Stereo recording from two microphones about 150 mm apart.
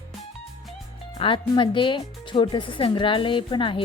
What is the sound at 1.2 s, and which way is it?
Speech, 35° left (ahead or behind).